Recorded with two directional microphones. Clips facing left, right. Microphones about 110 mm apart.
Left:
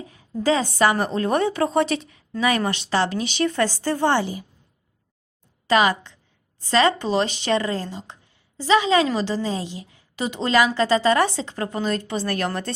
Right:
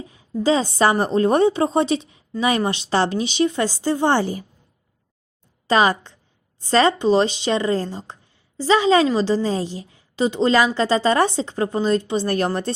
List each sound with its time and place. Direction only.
0.0 s a woman's voice: 30° right (ahead or behind)
3.5 s a woman's voice: 20° right (ahead or behind)
4.2 s a woman's voice: 40° right (ahead or behind)
5.6 s a woman's voice: 30° right (ahead or behind)